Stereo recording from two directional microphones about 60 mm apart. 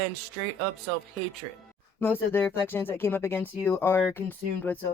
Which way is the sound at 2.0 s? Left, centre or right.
Left.